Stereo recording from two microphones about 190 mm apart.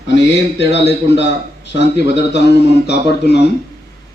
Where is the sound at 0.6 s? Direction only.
65° left (ahead or behind).